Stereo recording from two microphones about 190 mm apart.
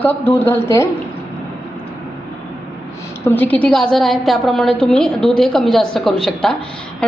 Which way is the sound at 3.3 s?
10° left (ahead or behind).